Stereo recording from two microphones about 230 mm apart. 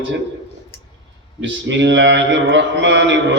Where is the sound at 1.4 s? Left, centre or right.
Right.